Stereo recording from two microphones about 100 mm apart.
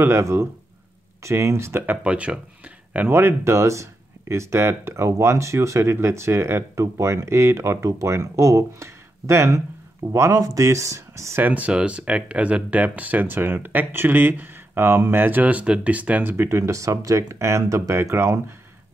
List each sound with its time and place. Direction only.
0.0 s speech: 25° right (ahead or behind)
2.0 s speech: 10° right (ahead or behind); by 11.4 s 30° right (ahead or behind)
11.4 s speech: 15° right (ahead or behind)